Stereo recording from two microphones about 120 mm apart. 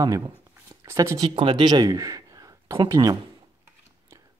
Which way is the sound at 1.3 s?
45° right (ahead or behind).